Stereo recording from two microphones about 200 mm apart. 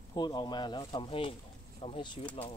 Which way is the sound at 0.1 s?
20° left (ahead or behind).